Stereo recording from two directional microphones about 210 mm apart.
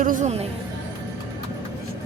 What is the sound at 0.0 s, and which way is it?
Speech, 40° right (ahead or behind).